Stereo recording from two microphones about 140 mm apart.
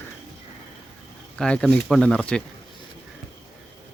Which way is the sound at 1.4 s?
5° left (ahead or behind).